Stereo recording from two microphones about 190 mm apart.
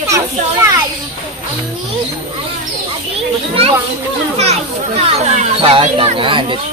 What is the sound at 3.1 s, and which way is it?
A child's voice, 30° right (ahead or behind).